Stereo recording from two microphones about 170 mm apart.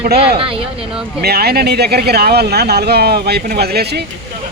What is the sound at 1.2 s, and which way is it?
Speech, 65° right (ahead or behind).